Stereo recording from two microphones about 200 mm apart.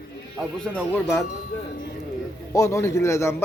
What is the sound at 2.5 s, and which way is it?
Speech, 15° left (ahead or behind).